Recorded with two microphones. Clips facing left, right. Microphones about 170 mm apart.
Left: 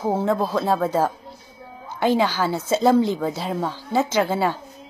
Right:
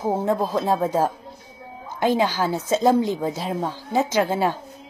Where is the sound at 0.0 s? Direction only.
15° right (ahead or behind).